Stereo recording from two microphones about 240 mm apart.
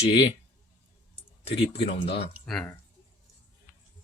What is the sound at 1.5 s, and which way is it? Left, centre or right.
Speech, left.